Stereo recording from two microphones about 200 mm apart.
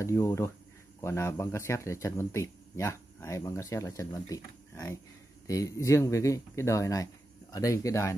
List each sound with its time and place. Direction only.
0.0 s speech: 15° left (ahead or behind)